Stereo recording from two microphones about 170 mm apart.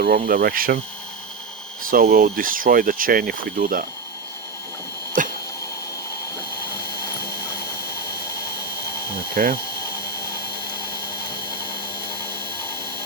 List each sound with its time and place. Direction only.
0.0 s speech: 60° right (ahead or behind)
1.9 s speech: 60° right (ahead or behind)
5.2 s a sound: 50° right (ahead or behind)
9.1 s speech: 60° right (ahead or behind)